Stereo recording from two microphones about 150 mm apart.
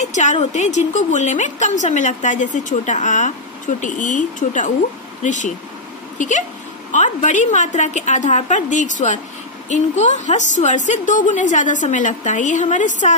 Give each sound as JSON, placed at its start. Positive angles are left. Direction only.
{"t": 0.0, "sound": "a woman's voice", "side_deg": 50}